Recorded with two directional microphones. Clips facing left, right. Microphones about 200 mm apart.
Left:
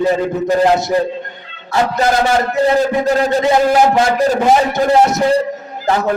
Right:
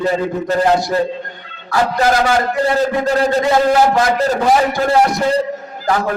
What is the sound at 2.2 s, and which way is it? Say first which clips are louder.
Music: left 2 dB; 25° left (ahead or behind).